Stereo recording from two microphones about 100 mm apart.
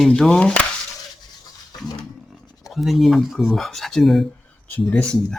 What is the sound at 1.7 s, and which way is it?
Roaring cats, 40° left (ahead or behind).